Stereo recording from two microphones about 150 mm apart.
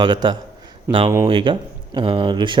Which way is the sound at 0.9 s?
15° right (ahead or behind).